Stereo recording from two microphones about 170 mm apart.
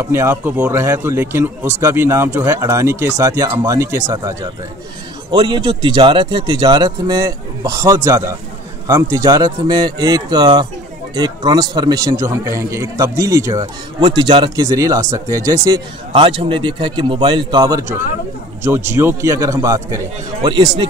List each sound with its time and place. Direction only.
0.0 s speech: 15° right (ahead or behind)